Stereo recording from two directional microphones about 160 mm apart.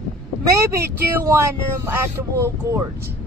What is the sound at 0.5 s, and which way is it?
Speech, 20° right (ahead or behind).